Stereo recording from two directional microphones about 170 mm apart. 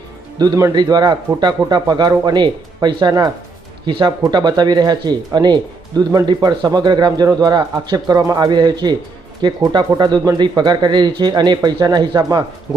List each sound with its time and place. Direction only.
0.3 s speech: 20° right (ahead or behind)